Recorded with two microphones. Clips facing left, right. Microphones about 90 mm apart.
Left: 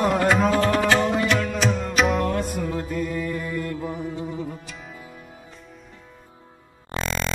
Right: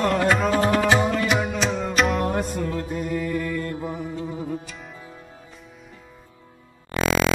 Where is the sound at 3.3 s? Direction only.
25° left (ahead or behind).